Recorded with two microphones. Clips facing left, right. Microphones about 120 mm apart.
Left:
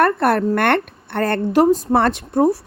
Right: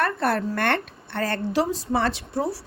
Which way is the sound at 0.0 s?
60° left (ahead or behind).